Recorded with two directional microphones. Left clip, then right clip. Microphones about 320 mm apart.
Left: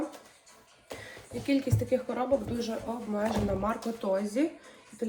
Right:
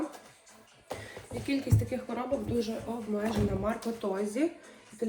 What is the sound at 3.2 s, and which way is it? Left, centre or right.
Speech, centre.